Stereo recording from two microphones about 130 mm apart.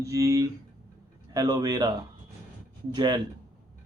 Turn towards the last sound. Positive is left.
turn(degrees=-35)  # may be behind; listen again after turning